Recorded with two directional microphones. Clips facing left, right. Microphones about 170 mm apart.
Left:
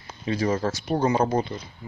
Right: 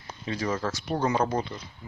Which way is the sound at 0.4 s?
30° left (ahead or behind).